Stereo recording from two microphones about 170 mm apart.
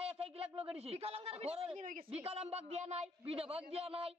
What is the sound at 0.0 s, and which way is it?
A man's voice, 35° right (ahead or behind).